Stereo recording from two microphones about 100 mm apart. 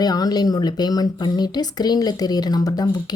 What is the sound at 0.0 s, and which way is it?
Speech, 40° left (ahead or behind).